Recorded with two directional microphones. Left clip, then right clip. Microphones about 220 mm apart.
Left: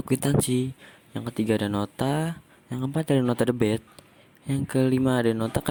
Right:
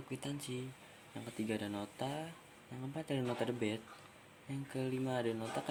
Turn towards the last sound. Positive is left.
turn(degrees=45)  # may be behind; listen again after turning